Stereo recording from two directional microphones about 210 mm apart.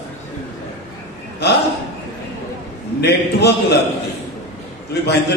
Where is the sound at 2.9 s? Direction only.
50° left (ahead or behind).